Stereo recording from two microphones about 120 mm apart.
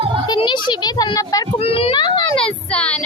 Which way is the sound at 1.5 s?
55° left (ahead or behind).